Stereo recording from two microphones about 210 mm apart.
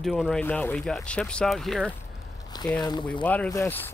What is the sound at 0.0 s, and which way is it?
Speech, centre (ahead or behind).